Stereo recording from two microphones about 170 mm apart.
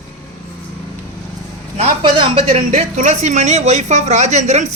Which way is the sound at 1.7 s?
35° right (ahead or behind).